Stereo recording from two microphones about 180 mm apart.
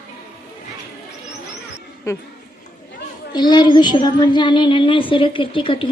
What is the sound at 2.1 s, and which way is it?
Speech, 15° left (ahead or behind).